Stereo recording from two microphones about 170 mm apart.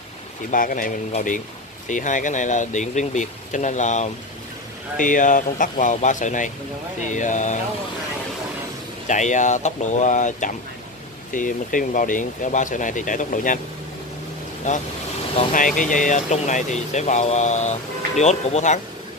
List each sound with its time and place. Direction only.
0.5 s speech: 50° left (ahead or behind)
9.0 s speech: 45° left (ahead or behind)
14.7 s speech: 45° left (ahead or behind)